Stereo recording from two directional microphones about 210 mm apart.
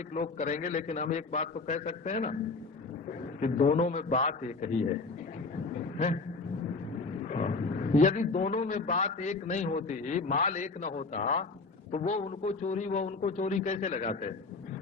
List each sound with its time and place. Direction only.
0.1 s a man's voice: 35° left (ahead or behind)
7.3 s a man's voice: 35° left (ahead or behind)